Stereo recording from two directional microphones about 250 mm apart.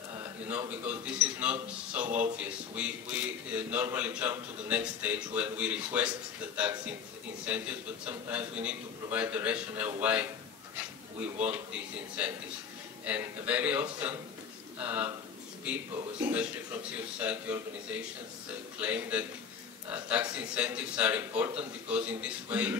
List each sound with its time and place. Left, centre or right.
0.5 s a man's voice: centre
17.2 s a man's voice: centre
18.8 s a man's voice: centre